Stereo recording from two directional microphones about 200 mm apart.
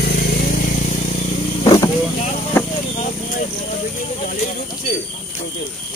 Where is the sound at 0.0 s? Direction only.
55° left (ahead or behind).